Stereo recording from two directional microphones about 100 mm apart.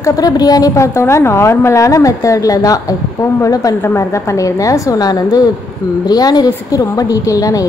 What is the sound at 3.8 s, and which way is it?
A woman's voice, 25° left (ahead or behind).